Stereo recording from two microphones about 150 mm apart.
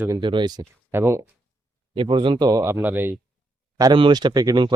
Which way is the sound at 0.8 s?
15° right (ahead or behind).